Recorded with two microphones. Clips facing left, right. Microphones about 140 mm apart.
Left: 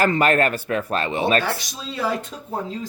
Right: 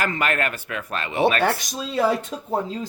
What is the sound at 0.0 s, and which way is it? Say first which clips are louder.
Speech: left 6 dB; 35° left (ahead or behind).